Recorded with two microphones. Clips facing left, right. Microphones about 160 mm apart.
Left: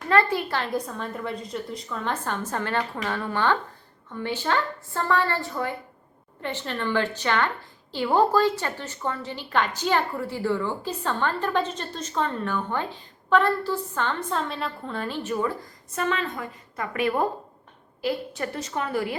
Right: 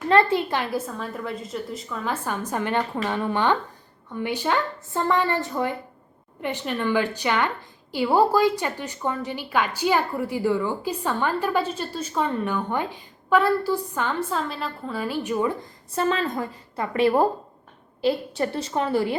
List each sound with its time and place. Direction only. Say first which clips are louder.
0.1 s a woman's voice: right 3 dB; 25° right (ahead or behind)
0.6 s a woman's voice: right 1 dB; 5° right (ahead or behind)
16.0 s a woman's voice: right 4 dB; 35° right (ahead or behind)